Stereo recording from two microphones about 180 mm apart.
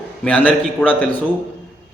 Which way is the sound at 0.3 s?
10° left (ahead or behind).